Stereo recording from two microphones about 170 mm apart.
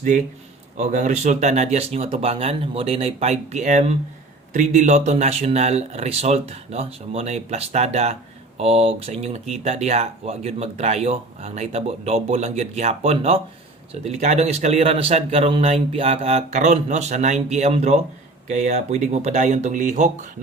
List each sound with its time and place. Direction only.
0.8 s a man's voice: 45° right (ahead or behind)